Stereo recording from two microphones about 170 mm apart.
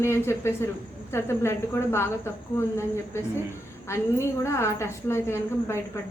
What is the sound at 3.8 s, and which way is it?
Speech, 15° left (ahead or behind).